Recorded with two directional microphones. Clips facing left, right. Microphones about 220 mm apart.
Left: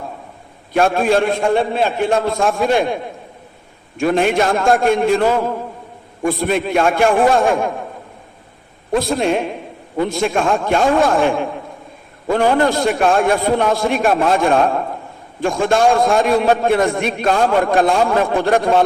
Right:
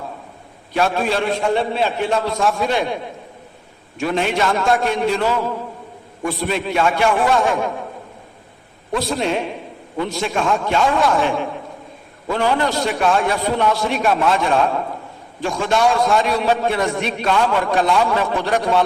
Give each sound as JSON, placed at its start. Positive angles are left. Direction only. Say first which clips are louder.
{"t": 0.7, "sound": "a man's voice", "louder": "left 5 dB", "side_deg": 50}
{"t": 8.9, "sound": "a man's voice", "louder": "left 4 dB", "side_deg": 50}